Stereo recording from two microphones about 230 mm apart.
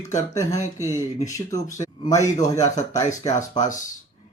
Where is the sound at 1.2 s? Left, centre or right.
Centre.